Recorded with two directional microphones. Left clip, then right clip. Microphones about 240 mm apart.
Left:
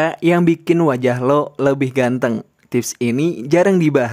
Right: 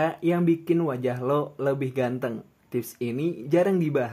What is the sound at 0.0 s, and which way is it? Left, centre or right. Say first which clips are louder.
Speech: left 9 dB; left.